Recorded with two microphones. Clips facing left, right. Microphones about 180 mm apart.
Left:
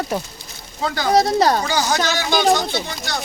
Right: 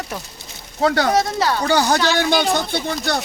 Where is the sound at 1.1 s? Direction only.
35° left (ahead or behind).